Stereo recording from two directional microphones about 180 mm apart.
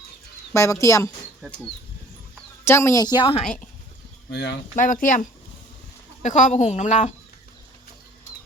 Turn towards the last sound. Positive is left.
turn(degrees=40)  # may be behind; listen again after turning